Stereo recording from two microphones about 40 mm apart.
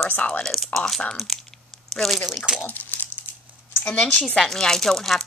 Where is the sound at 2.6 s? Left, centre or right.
Left.